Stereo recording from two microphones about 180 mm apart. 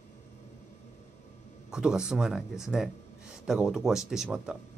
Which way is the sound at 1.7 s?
5° right (ahead or behind).